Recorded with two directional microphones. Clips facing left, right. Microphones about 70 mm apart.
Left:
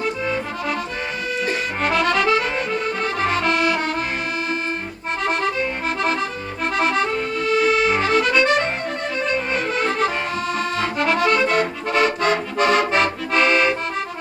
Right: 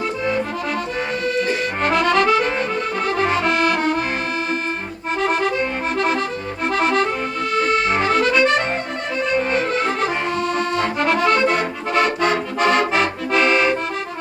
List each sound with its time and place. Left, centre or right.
1.4 s accordion: centre
5.2 s accordion: centre